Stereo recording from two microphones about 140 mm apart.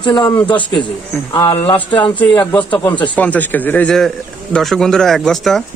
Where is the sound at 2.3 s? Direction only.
30° left (ahead or behind).